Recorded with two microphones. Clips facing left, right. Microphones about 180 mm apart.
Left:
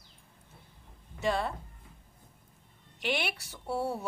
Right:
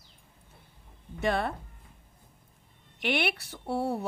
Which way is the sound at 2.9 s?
60° right (ahead or behind).